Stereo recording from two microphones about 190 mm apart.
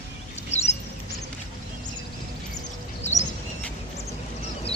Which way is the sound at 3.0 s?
35° left (ahead or behind).